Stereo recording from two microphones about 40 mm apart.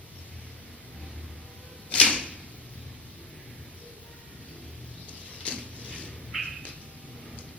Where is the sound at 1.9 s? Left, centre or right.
Left.